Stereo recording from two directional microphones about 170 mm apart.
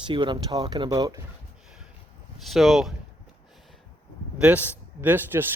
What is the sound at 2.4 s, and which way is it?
Speech, centre (ahead or behind).